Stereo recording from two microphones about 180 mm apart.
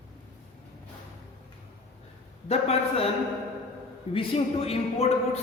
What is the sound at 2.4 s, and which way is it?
Speech, 35° left (ahead or behind).